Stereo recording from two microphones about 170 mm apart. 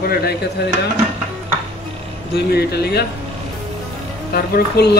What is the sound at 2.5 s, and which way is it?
Speech, 70° left (ahead or behind).